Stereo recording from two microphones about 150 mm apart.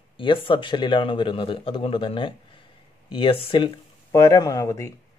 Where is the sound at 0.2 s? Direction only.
35° left (ahead or behind).